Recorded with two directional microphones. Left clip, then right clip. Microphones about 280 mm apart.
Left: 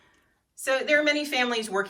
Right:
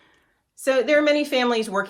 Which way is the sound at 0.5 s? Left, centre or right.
Right.